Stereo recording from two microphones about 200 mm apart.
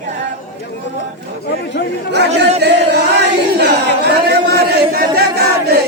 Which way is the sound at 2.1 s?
60° right (ahead or behind).